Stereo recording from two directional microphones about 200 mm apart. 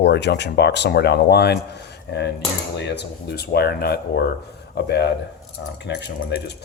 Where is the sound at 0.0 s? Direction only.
60° left (ahead or behind).